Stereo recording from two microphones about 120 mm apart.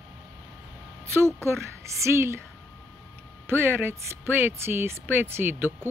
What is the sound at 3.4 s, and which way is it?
Speech, 20° right (ahead or behind).